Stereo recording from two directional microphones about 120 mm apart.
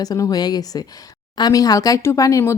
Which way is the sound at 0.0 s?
30° left (ahead or behind).